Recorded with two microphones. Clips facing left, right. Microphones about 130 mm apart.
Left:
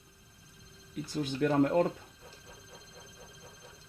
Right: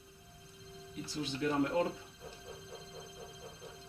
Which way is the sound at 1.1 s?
50° left (ahead or behind).